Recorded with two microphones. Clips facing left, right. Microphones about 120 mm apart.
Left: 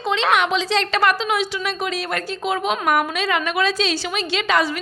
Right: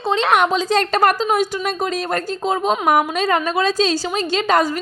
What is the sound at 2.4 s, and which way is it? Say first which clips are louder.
A woman's voice: right 3 dB; 35° right (ahead or behind).